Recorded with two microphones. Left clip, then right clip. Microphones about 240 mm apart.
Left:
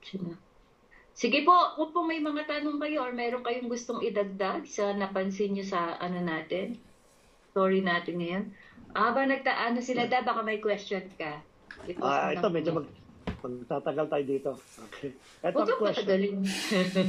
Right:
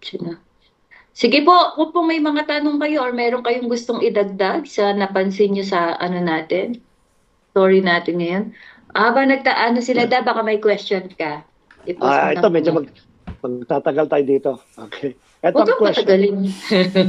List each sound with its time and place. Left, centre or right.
0.0 s speech: right